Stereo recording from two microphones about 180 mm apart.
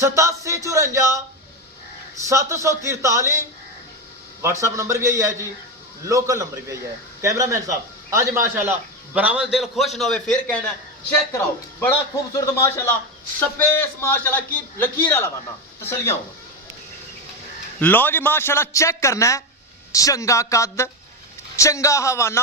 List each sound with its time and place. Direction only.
0.0 s music: 15° right (ahead or behind)
2.2 s a man's voice: 15° right (ahead or behind)
4.4 s a man's voice: 15° right (ahead or behind); by 10.6 s 5° left (ahead or behind)
11.8 s a man's voice: 15° left (ahead or behind)
17.7 s a man's voice: 10° left (ahead or behind)